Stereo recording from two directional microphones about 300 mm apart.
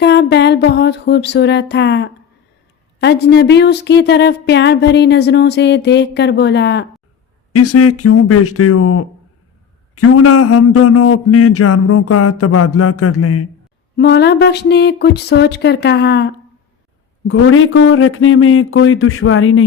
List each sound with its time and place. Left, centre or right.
0.0 s a woman's voice: left
7.5 s speech: left
13.9 s a woman's voice: left